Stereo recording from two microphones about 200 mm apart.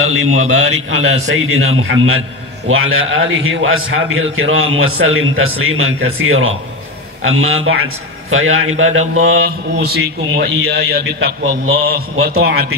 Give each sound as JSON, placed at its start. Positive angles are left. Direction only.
{"t": 0.0, "sound": "a man's voice", "side_deg": -90}
{"t": 9.1, "sound": "mantra", "side_deg": -80}
{"t": 9.4, "sound": "a man's voice", "side_deg": -55}